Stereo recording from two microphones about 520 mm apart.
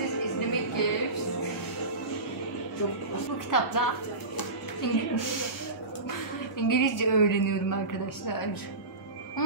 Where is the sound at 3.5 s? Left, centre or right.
Left.